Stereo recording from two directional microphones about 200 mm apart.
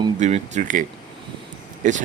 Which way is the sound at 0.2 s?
35° right (ahead or behind).